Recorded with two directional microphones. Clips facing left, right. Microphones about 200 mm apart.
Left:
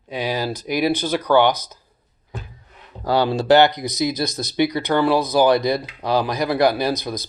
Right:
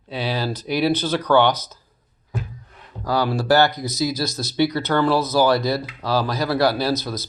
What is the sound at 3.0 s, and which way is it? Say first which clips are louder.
Speech: left 3 dB; 25° left (ahead or behind).